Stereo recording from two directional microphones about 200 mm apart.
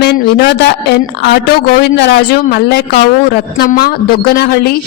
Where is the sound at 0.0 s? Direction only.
55° left (ahead or behind).